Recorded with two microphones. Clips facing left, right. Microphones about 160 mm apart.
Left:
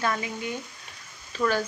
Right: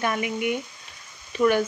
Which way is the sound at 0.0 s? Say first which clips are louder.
Right 4 dB; 20° right (ahead or behind).